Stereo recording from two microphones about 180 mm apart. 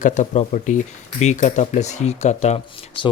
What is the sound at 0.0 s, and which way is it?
Speech, 40° left (ahead or behind).